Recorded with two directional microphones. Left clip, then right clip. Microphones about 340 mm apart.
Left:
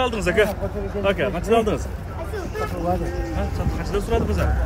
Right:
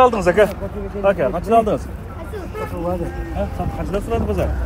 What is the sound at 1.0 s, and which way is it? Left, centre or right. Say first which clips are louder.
Speech: right 5 dB; centre.